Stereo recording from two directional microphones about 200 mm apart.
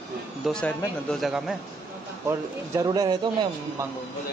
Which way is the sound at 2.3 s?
15° right (ahead or behind).